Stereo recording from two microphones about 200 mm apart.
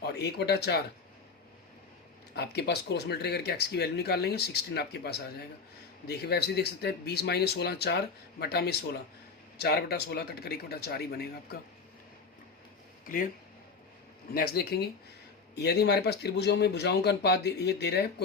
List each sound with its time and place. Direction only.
0.0 s speech: 55° left (ahead or behind)
2.3 s speech: 55° left (ahead or behind)
14.3 s speech: 50° left (ahead or behind)